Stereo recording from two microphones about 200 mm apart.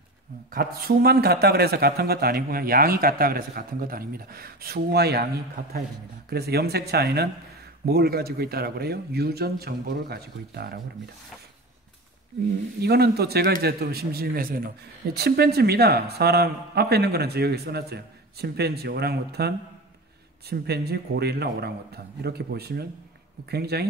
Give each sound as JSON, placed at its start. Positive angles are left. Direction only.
{"t": 0.5, "sound": "a man's voice", "side_deg": -50}
{"t": 12.8, "sound": "a man's voice", "side_deg": -55}